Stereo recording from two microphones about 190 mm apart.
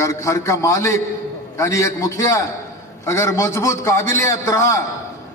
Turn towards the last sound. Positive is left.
turn(degrees=15)  # may be behind; listen again after turning